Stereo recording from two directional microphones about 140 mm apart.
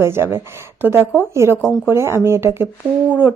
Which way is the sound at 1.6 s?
Centre (ahead or behind).